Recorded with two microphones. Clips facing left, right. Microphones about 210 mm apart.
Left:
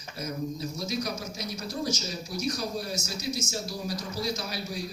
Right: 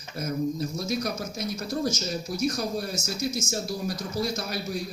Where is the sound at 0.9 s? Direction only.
50° right (ahead or behind).